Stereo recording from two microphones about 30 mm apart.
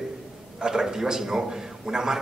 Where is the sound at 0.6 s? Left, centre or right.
Right.